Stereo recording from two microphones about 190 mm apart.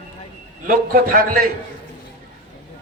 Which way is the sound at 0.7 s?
50° right (ahead or behind).